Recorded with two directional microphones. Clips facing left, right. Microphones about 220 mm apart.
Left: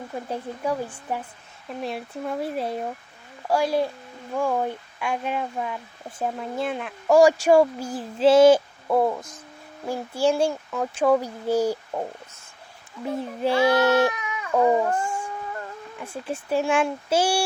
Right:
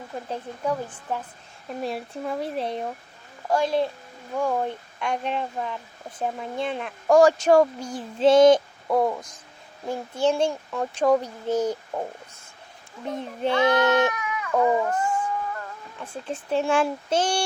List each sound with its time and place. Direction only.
0.3 s a woman's voice: 10° left (ahead or behind)
4.4 s a woman's voice: 5° left (ahead or behind)
13.4 s speech: 5° left (ahead or behind)
13.7 s speech: 30° left (ahead or behind)
14.6 s howl: 30° left (ahead or behind)
16.0 s speech: 10° left (ahead or behind)